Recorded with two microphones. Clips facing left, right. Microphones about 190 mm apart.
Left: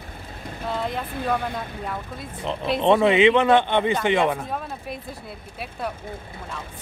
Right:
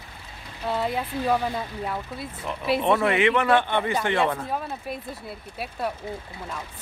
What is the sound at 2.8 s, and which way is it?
A man's voice, 20° left (ahead or behind).